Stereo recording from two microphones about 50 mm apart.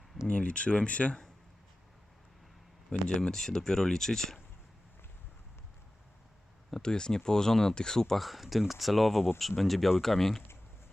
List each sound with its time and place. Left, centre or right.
0.3 s speech: left
3.2 s speech: centre
6.7 s speech: centre